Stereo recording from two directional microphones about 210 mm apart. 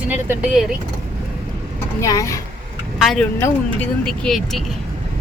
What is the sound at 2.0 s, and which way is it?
Speech, 15° left (ahead or behind).